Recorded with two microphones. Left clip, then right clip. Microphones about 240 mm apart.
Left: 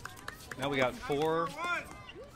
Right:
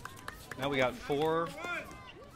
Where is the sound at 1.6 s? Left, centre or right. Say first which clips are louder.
Left 4 dB; centre.